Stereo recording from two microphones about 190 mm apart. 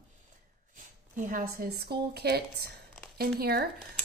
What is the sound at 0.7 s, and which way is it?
A woman's voice, 45° right (ahead or behind).